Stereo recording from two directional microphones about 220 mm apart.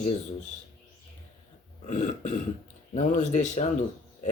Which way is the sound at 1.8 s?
30° left (ahead or behind).